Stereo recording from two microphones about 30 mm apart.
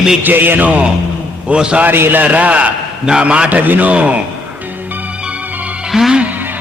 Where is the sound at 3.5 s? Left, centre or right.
Right.